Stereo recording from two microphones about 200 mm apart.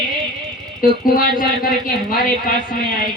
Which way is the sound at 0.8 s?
45° left (ahead or behind).